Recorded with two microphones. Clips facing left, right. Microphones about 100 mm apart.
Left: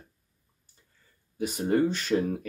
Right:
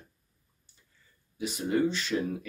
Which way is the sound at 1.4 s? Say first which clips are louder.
Left 3 dB; 45° left (ahead or behind).